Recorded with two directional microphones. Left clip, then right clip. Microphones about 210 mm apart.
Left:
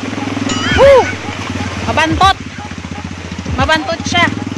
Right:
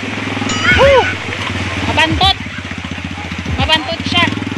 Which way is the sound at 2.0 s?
20° left (ahead or behind).